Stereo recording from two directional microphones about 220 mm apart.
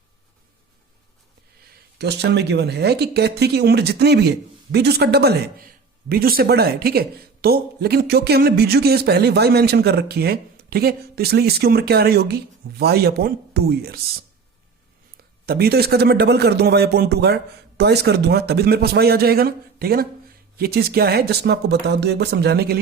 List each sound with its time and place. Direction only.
2.0 s speech: 50° right (ahead or behind)
15.4 s speech: 45° right (ahead or behind)